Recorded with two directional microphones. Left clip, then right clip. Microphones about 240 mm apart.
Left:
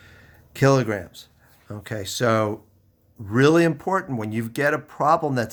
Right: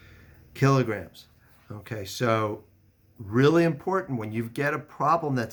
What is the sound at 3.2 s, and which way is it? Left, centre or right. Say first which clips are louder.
Speech: left 4 dB; left.